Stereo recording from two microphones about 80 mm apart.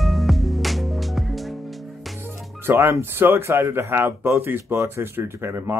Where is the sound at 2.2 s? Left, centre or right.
Right.